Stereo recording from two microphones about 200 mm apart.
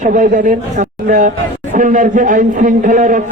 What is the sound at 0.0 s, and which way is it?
A man's voice, 40° right (ahead or behind).